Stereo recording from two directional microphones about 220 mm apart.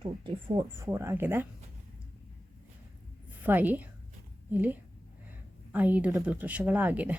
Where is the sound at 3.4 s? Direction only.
10° right (ahead or behind).